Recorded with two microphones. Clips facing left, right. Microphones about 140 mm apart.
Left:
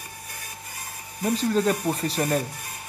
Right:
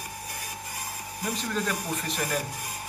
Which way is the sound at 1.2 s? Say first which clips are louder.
Left 8 dB; 35° left (ahead or behind).